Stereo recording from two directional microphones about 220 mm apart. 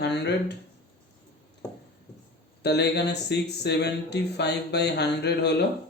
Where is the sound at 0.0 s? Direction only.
50° left (ahead or behind).